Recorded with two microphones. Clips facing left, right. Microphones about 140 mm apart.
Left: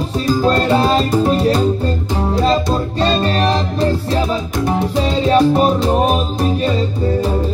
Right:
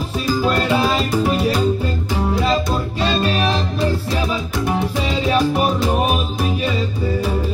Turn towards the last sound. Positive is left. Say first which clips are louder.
# left 4 dB
turn(degrees=25)  # may be behind; listen again after turning